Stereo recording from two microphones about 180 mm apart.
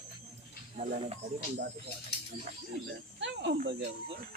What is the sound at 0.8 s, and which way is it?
Speech, 35° right (ahead or behind).